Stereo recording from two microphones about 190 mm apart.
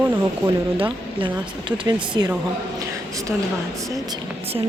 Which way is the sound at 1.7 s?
20° right (ahead or behind).